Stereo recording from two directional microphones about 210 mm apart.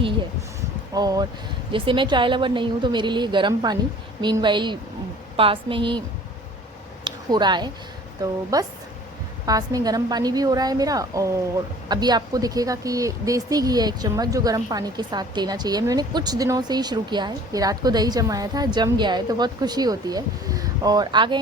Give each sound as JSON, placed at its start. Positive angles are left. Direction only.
{"t": 0.9, "sound": "speech", "side_deg": -20}
{"t": 7.0, "sound": "a sound", "side_deg": -20}
{"t": 8.2, "sound": "a woman's voice", "side_deg": -15}